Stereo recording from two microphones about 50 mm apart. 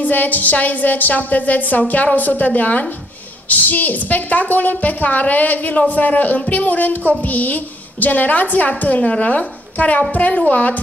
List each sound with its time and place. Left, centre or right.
0.0 s a woman's voice: left